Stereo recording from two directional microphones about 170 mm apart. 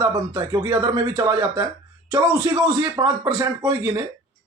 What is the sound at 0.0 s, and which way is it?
Speech, 20° right (ahead or behind).